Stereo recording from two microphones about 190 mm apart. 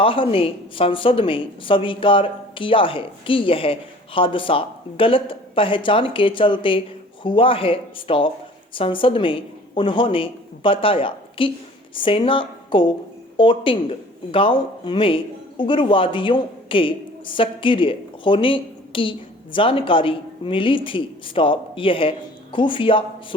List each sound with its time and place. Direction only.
0.0 s a woman's voice: 30° left (ahead or behind)